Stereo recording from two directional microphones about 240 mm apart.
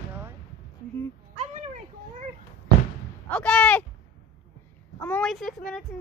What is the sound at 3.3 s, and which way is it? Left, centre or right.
Speech, centre.